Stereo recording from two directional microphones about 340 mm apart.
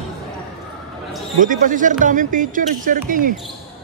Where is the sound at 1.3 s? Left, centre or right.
Right.